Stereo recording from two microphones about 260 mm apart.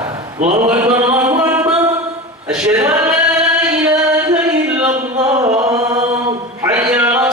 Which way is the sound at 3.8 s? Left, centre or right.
Centre.